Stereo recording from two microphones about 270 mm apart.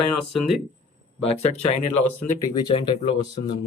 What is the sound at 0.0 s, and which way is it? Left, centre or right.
Speech, left.